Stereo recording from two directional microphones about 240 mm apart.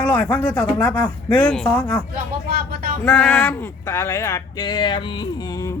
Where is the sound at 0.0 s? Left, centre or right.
Centre.